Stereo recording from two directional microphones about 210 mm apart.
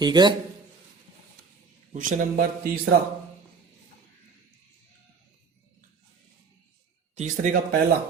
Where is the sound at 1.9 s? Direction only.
40° right (ahead or behind).